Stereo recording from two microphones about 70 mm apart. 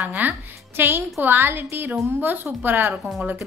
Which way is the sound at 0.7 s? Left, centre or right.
Right.